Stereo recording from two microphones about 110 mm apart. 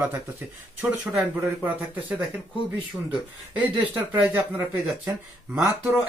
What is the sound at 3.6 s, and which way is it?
Speech, 15° right (ahead or behind).